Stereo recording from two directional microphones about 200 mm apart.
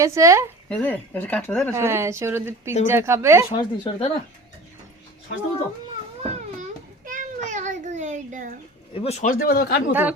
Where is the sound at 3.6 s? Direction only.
30° left (ahead or behind).